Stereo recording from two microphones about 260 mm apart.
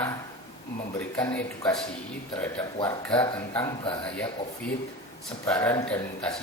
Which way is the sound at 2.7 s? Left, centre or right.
Centre.